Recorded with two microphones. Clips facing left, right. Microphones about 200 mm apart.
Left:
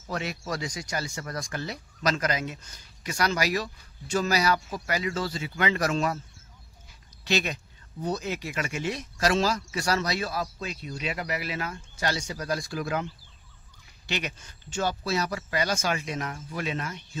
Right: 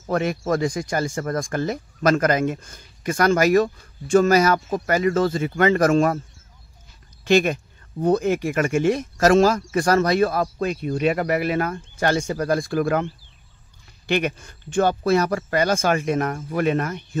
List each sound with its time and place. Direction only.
0.0 s speech: 50° right (ahead or behind)
7.2 s speech: 50° right (ahead or behind)